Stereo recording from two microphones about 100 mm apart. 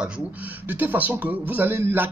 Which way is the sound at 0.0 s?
15° right (ahead or behind).